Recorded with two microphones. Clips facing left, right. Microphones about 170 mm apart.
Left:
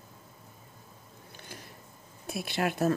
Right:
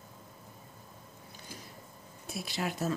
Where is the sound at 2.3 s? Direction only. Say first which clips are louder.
Left 5 dB; 60° left (ahead or behind).